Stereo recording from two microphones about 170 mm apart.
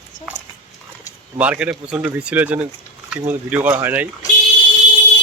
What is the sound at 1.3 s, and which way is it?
Speech, 5° right (ahead or behind).